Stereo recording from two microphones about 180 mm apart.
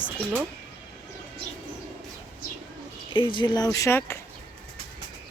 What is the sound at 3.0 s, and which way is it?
Speech, 30° left (ahead or behind).